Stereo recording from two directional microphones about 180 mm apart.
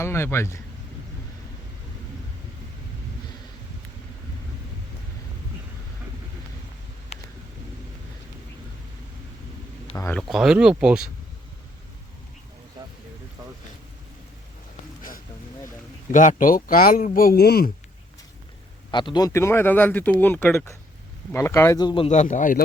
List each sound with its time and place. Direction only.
0.0 s speech: 15° left (ahead or behind)
7.1 s vehicle: 35° left (ahead or behind)
9.9 s speech: 15° left (ahead or behind)
10.2 s speech: centre (ahead or behind)
16.1 s speech: 45° left (ahead or behind)
18.9 s speech: 25° left (ahead or behind); by 22.6 s 45° left (ahead or behind)